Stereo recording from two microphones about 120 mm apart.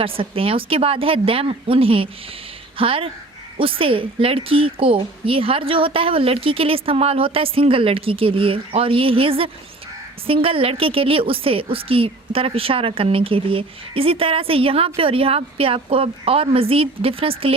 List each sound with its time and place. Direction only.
0.0 s a woman's voice: 50° right (ahead or behind)